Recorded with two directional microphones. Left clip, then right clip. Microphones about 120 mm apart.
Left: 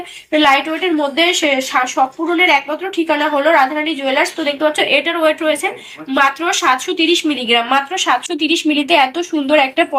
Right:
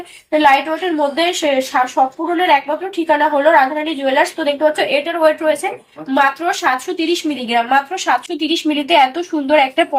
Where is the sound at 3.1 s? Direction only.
10° left (ahead or behind).